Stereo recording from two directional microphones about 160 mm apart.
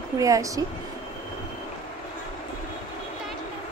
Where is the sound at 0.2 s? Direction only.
20° right (ahead or behind).